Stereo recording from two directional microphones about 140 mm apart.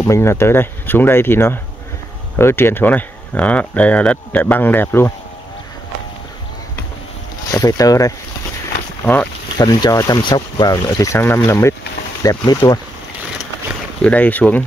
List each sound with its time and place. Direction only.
0.0 s speech: 20° left (ahead or behind)
7.5 s speech: 25° left (ahead or behind)
9.0 s speech: 10° left (ahead or behind)
9.6 s speech: 30° left (ahead or behind)
14.0 s speech: 10° left (ahead or behind)